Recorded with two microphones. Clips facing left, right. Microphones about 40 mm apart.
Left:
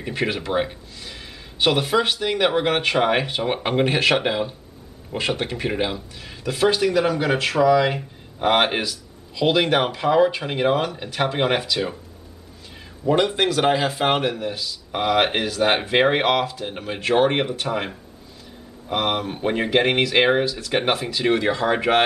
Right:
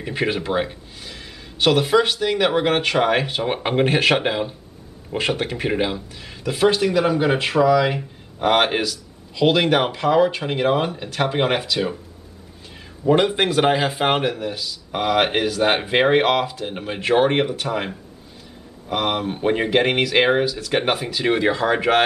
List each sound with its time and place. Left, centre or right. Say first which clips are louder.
0.2 s speech: right 1 dB; centre
7.7 s speech: even; centre
13.0 s speech: right 2 dB; centre
14.4 s speech: even; centre
21.6 s speech: even; centre